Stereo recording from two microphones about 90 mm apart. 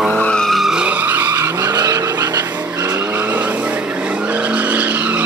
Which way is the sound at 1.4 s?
45° right (ahead or behind).